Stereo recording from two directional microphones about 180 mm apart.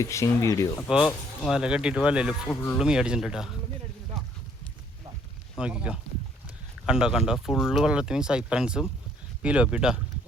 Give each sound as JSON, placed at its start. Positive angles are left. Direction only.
{"t": 0.0, "sound": "speech", "side_deg": 15}
{"t": 0.9, "sound": "speech", "side_deg": 0}
{"t": 5.5, "sound": "speech", "side_deg": -5}